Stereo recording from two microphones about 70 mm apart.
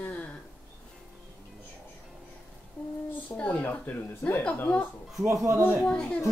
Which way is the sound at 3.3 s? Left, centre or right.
Left.